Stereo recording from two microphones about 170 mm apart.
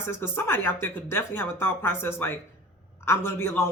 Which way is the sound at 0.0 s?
15° left (ahead or behind).